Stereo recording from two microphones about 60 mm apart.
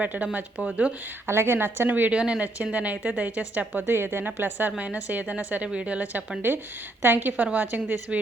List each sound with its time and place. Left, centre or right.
0.0 s a woman's voice: right
1.3 s a woman's voice: right